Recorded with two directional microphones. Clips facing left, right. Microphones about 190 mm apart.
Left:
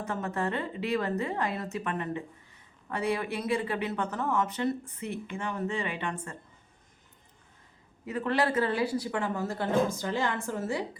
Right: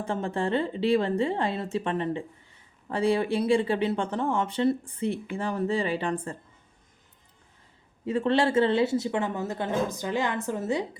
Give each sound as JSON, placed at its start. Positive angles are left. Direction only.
{"t": 0.0, "sound": "speech", "side_deg": -30}
{"t": 8.0, "sound": "speech", "side_deg": -25}